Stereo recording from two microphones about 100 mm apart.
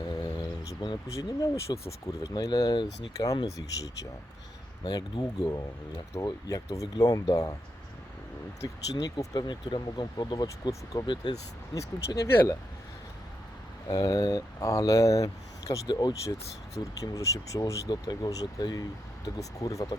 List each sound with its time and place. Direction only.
0.6 s a sound: 35° left (ahead or behind)
1.0 s speech: 35° left (ahead or behind)
8.6 s speech: 40° left (ahead or behind)
11.7 s speech: 35° left (ahead or behind)
13.8 s speech: 40° left (ahead or behind)
16.7 s speech: 30° left (ahead or behind)